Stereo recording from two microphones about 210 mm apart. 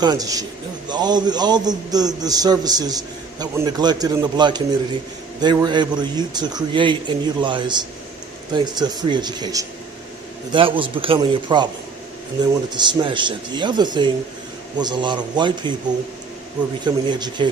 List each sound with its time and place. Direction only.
0.0 s a man's voice: 20° right (ahead or behind)
12.7 s a man's voice: 20° right (ahead or behind)
16.8 s a man's voice: 20° right (ahead or behind)